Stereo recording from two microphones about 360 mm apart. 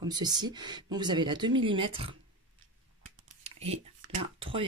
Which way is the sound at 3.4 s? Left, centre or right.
Centre.